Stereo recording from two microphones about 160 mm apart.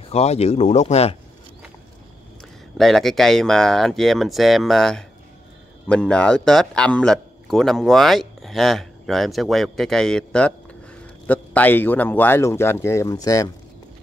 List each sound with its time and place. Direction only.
0.1 s speech: 40° left (ahead or behind)
2.8 s a man's voice: centre (ahead or behind); by 13.5 s 20° left (ahead or behind)